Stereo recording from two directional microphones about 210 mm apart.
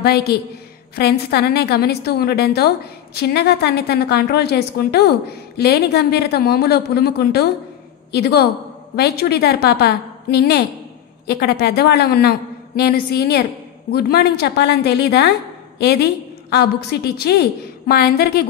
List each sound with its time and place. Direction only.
0.0 s a woman's voice: 50° left (ahead or behind)